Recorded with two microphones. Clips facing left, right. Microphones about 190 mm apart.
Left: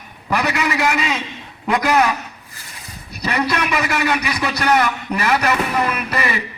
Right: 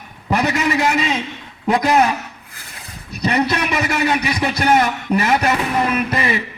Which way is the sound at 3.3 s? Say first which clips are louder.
Right 1 dB; 30° right (ahead or behind).